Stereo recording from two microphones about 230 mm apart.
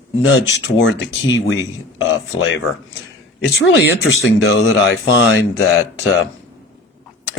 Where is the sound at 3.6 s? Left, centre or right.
Left.